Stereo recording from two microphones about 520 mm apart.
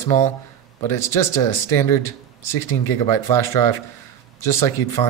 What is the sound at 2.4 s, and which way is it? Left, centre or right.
Speech, right.